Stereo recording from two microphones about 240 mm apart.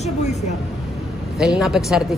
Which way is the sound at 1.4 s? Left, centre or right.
Centre.